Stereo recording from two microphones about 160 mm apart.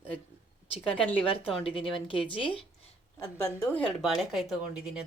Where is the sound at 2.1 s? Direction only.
35° left (ahead or behind).